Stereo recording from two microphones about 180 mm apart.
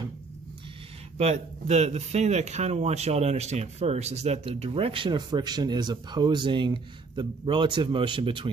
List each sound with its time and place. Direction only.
1.1 s speech: 40° right (ahead or behind)